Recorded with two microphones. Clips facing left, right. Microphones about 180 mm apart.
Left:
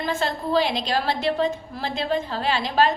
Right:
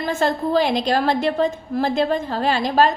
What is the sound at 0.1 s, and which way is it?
A woman's voice, 50° right (ahead or behind).